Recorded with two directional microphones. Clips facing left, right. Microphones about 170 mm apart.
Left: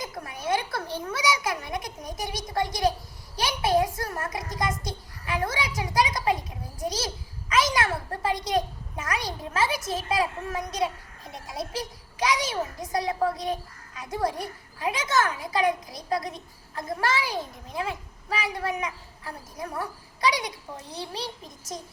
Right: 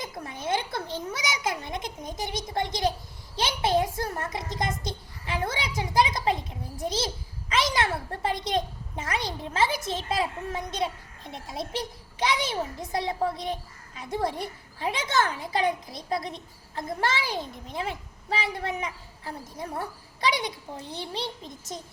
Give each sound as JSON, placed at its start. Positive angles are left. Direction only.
{"t": 0.0, "sound": "a child's voice", "side_deg": -25}
{"t": 3.3, "sound": "a sound", "side_deg": -25}
{"t": 12.8, "sound": "a child's voice", "side_deg": -25}